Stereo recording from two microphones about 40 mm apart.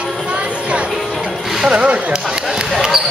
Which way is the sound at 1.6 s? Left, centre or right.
Right.